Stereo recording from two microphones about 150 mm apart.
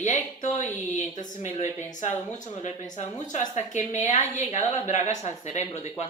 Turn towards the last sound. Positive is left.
turn(degrees=45)  # may be behind; listen again after turning